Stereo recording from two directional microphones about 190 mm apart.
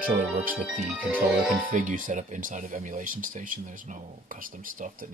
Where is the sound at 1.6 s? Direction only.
45° right (ahead or behind).